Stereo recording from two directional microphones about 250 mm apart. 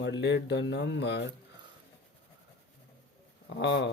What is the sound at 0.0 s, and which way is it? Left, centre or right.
Speech, left.